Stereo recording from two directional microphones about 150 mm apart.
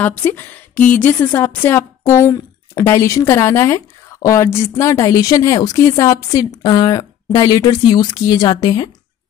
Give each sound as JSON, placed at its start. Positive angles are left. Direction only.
{"t": 0.0, "sound": "a woman's voice", "side_deg": 10}